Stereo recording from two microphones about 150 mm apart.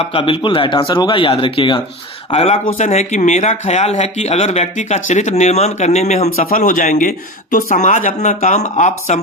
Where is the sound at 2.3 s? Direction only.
45° left (ahead or behind).